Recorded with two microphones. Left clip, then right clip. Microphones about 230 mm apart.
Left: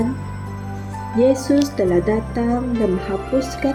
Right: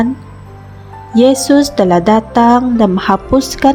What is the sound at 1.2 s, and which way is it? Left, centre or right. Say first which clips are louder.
Speech: right 7 dB; right.